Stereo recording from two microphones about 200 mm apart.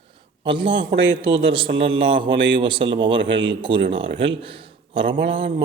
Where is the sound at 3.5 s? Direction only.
25° right (ahead or behind).